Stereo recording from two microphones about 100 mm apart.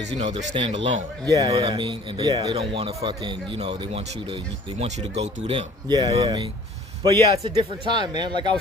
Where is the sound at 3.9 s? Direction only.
75° right (ahead or behind).